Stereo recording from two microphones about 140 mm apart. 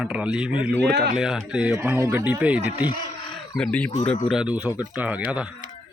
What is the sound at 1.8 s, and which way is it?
Speech, 15° right (ahead or behind).